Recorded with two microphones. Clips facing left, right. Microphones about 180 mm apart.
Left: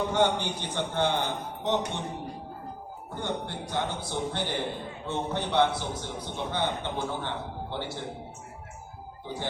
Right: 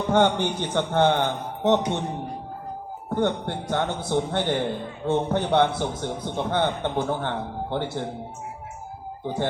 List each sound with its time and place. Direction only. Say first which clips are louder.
0.1 s a man's voice: right 5 dB; 55° right (ahead or behind)
3.2 s a man's voice: right 8 dB; 55° right (ahead or behind)
9.2 s a man's voice: right 8 dB; 55° right (ahead or behind)